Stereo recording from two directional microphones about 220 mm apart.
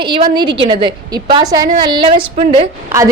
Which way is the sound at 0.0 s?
20° right (ahead or behind).